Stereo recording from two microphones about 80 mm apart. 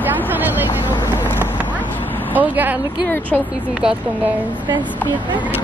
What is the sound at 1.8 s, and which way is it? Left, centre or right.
Vehicle, left.